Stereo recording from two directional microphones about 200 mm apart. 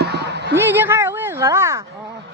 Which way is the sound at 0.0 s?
55° right (ahead or behind).